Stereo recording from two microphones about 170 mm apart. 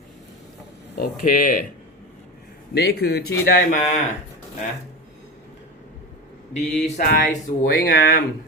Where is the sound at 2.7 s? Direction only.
70° left (ahead or behind); by 4.0 s 55° left (ahead or behind).